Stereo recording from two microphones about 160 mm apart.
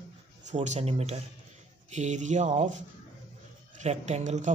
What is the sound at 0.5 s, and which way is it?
Speech, 45° right (ahead or behind).